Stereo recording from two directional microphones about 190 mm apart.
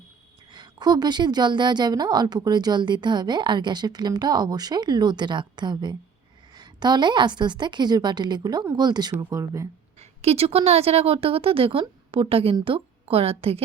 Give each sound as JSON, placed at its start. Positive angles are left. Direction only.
{"t": 0.5, "sound": "a woman's voice", "side_deg": -20}
{"t": 10.0, "sound": "a woman's voice", "side_deg": -35}